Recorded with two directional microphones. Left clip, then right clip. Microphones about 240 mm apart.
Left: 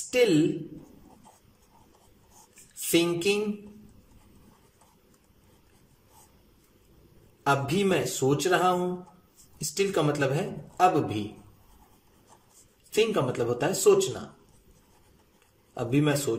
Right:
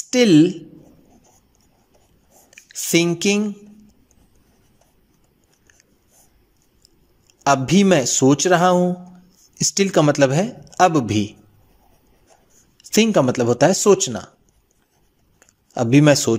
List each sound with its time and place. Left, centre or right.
0.1 s speech: right
3.0 s speech: right
7.4 s speech: right
12.9 s speech: right
15.7 s speech: right